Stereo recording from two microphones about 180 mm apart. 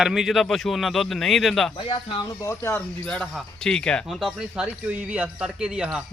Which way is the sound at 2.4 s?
15° left (ahead or behind).